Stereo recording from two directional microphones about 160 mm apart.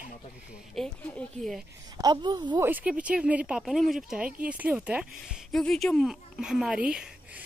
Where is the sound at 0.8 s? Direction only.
Centre (ahead or behind).